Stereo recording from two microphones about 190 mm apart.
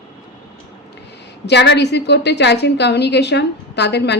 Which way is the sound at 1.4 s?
65° left (ahead or behind).